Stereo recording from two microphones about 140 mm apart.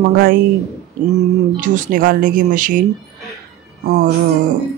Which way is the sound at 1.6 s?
70° right (ahead or behind).